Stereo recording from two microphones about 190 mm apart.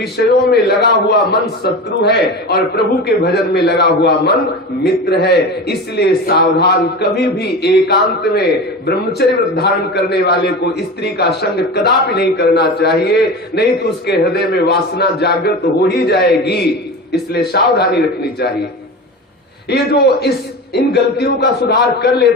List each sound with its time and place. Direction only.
0.5 s a man's voice: 60° left (ahead or behind)
19.7 s a man's voice: 60° left (ahead or behind)